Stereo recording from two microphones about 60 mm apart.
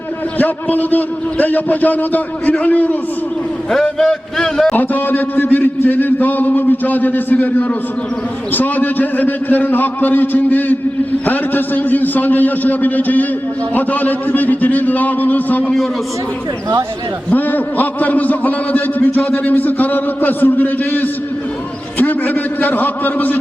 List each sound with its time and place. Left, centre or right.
0.3 s a man's voice: left
3.9 s speech: centre
4.7 s a man's voice: left
17.3 s a man's voice: left
22.6 s a man's voice: left